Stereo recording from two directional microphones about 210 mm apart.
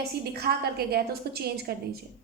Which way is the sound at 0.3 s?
50° right (ahead or behind).